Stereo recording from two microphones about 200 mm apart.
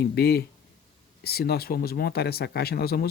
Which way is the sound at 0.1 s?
50° left (ahead or behind).